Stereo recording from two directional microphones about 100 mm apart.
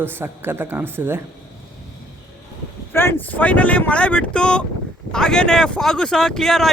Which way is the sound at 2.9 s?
25° left (ahead or behind).